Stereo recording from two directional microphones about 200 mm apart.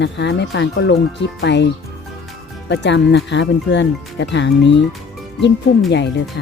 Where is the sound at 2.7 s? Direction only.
60° left (ahead or behind).